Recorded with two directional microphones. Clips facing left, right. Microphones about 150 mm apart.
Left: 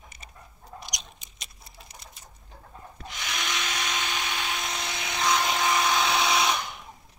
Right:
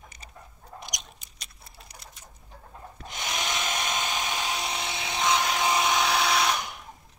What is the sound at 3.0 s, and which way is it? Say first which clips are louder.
Tools: right 2 dB; 40° right (ahead or behind).